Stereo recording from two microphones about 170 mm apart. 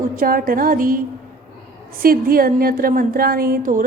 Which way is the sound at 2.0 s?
60° right (ahead or behind).